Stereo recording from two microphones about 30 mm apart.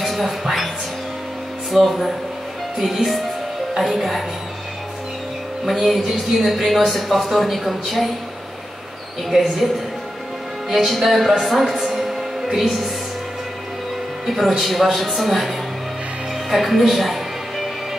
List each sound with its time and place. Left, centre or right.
0.0 s speech: centre
1.7 s speech: centre
5.7 s speech: centre
9.3 s speech: centre
10.7 s speech: centre
14.2 s a man's voice: centre